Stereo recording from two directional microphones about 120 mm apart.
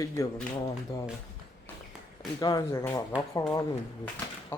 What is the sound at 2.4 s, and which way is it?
Speech, 30° left (ahead or behind).